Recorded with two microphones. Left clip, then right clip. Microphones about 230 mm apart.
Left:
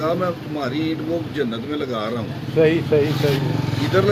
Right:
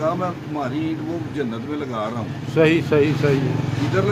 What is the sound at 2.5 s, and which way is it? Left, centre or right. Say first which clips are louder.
Speech: even; right.